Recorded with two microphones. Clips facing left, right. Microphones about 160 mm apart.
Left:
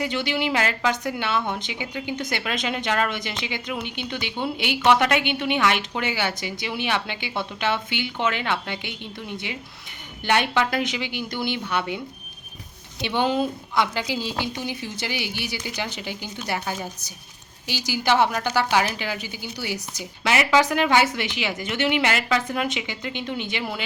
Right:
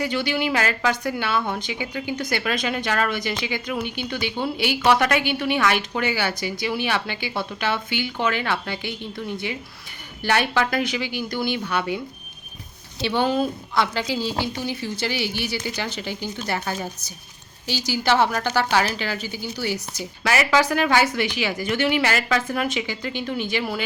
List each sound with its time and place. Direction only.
0.0 s a woman's voice: 20° left (ahead or behind)
10.2 s a woman's voice: 20° left (ahead or behind)
13.0 s a woman's voice: 20° left (ahead or behind)